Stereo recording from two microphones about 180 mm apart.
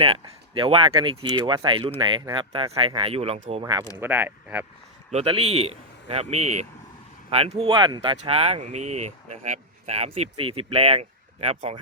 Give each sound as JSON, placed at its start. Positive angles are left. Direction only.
{"t": 0.0, "sound": "speech", "side_deg": -30}
{"t": 3.6, "sound": "speech", "side_deg": -20}
{"t": 5.1, "sound": "speech", "side_deg": -35}